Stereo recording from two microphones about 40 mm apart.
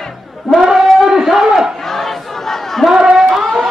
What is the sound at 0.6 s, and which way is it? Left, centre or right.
Speech, centre.